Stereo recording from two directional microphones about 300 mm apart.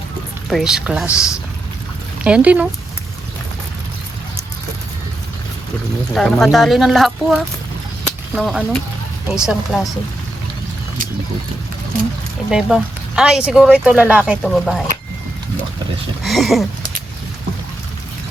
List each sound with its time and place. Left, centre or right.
0.5 s speech: centre
6.1 s speech: centre
12.5 s speech: centre
16.2 s a sound: centre